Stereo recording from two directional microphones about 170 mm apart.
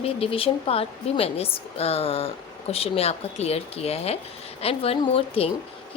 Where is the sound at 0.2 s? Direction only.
35° left (ahead or behind).